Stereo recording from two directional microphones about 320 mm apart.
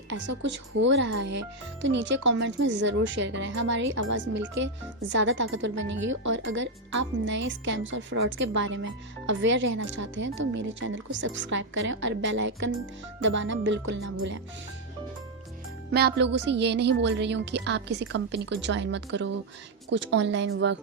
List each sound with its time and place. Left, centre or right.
0.9 s speech: right
15.9 s speech: right